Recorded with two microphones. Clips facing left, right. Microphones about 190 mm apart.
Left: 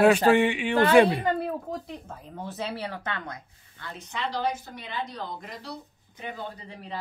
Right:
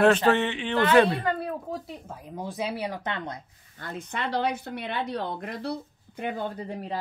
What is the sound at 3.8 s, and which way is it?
Speech, 50° right (ahead or behind).